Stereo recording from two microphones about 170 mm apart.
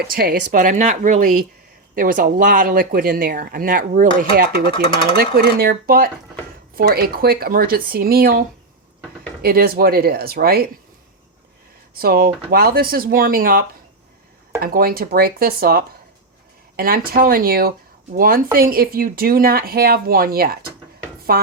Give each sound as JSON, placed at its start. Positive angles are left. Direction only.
{"t": 0.0, "sound": "speech", "side_deg": -60}
{"t": 5.1, "sound": "speech", "side_deg": -70}
{"t": 11.9, "sound": "speech", "side_deg": -60}